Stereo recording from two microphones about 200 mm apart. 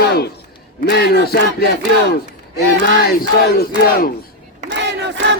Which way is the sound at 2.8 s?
50° left (ahead or behind).